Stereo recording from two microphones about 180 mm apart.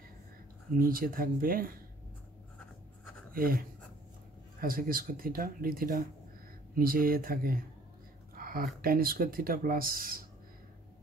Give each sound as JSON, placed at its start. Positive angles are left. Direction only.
{"t": 0.7, "sound": "speech", "side_deg": -50}
{"t": 3.3, "sound": "speech", "side_deg": -55}
{"t": 8.4, "sound": "a sound", "side_deg": -55}
{"t": 8.8, "sound": "speech", "side_deg": -55}